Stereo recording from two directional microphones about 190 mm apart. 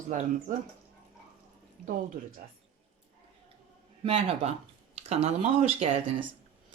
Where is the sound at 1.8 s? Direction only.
45° right (ahead or behind).